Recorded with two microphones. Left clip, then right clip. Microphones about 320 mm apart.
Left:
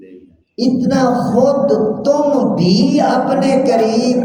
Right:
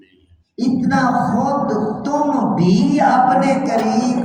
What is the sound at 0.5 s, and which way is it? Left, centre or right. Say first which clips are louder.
A woman's voice: left 2 dB; centre.